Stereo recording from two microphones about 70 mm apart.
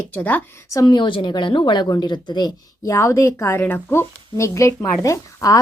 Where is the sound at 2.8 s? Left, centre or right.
Left.